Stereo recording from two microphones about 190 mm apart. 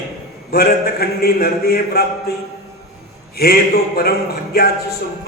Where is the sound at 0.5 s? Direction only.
55° left (ahead or behind).